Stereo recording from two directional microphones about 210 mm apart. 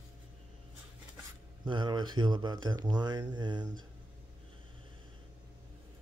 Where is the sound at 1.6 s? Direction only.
20° right (ahead or behind).